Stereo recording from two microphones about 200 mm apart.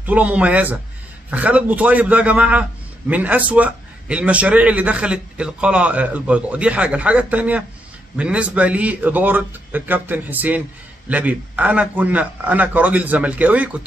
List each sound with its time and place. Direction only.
0.0 s a man's voice: 5° right (ahead or behind)